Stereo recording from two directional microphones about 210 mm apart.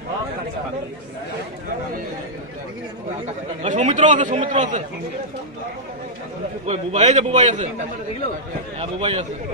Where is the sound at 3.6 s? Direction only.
35° right (ahead or behind).